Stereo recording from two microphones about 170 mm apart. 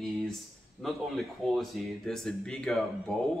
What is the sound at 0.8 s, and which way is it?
Speech, centre (ahead or behind).